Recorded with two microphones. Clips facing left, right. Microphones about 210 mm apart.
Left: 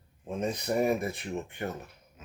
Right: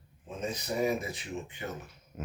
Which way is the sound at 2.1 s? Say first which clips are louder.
Right 13 dB; 60° right (ahead or behind).